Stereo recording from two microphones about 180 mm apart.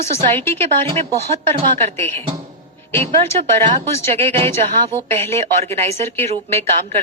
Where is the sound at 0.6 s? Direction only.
35° right (ahead or behind).